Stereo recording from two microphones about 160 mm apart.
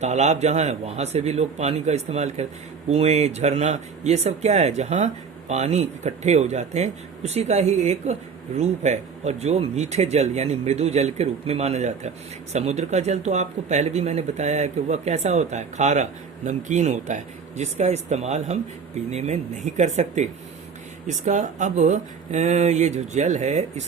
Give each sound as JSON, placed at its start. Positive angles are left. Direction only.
{"t": 0.0, "sound": "speech", "side_deg": -45}